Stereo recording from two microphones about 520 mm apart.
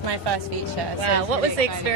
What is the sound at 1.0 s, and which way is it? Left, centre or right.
Speech, right.